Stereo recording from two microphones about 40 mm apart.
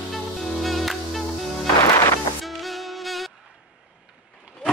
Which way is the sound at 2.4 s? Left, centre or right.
Centre.